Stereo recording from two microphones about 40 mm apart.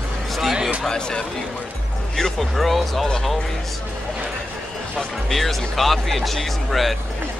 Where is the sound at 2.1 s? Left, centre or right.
Centre.